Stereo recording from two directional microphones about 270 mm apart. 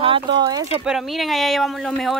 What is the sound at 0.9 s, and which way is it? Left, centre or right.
Speech, centre.